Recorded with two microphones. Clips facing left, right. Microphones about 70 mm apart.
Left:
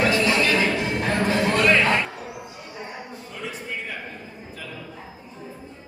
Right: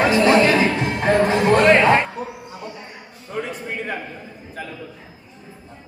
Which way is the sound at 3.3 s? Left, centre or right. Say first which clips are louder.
Right 6 dB; right.